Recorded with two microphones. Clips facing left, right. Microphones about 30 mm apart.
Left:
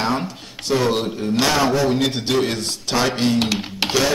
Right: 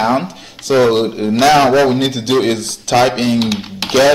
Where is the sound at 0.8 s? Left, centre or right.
Right.